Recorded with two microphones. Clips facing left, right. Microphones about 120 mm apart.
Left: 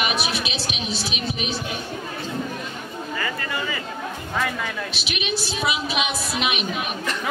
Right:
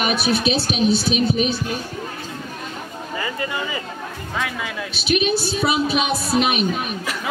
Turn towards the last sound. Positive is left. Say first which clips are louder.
# right 6 dB
turn(degrees=-40)  # may be behind; listen again after turning